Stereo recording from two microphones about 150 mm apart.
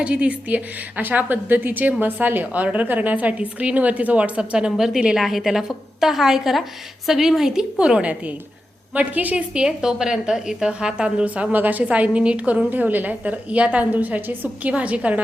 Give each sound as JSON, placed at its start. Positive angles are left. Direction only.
{"t": 0.0, "sound": "a woman's voice", "side_deg": -10}